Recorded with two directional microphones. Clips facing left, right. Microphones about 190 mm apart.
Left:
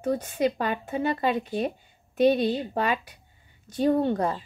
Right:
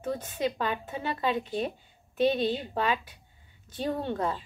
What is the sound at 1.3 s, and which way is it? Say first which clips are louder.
Speech: left 3 dB; 10° left (ahead or behind).